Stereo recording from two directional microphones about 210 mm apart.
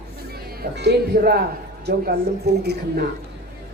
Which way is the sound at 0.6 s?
50° right (ahead or behind).